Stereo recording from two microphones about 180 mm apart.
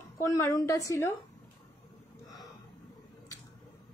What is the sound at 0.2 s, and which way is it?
Speech, 15° left (ahead or behind).